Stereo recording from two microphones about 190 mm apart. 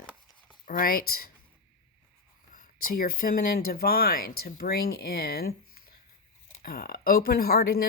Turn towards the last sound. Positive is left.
turn(degrees=55)  # may be behind; listen again after turning